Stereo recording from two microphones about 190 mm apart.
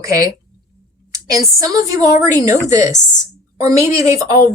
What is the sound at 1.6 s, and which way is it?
Speech, 20° right (ahead or behind).